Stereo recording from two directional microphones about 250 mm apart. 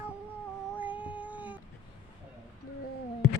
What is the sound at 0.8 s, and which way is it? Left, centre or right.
Cat, centre.